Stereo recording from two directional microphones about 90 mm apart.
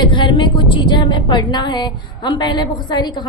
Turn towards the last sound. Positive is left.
turn(degrees=55)  # may be behind; listen again after turning